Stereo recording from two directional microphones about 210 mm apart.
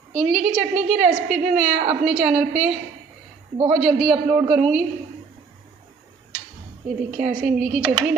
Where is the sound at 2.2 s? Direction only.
5° right (ahead or behind).